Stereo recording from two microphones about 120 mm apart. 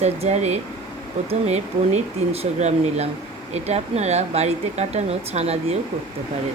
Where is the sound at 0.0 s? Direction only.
65° right (ahead or behind).